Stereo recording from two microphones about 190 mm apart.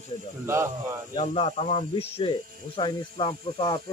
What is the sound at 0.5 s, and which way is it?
Speech, 15° right (ahead or behind).